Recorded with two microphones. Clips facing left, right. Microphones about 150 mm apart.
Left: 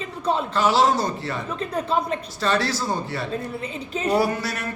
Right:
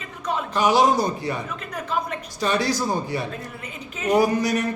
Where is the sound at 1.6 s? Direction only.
30° left (ahead or behind).